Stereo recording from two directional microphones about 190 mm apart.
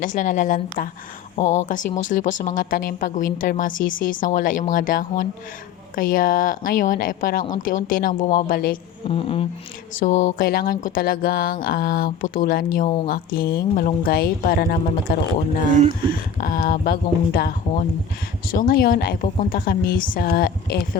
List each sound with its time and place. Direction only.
0.0 s speech: 45° left (ahead or behind)
9.0 s a sound: 30° left (ahead or behind)
10.0 s speech: 40° left (ahead or behind)
16.4 s speech: 50° left (ahead or behind)